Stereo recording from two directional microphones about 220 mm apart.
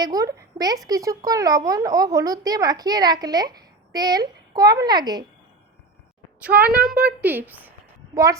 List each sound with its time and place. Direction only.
0.0 s speech: 15° right (ahead or behind)
6.4 s a child's voice: 5° right (ahead or behind)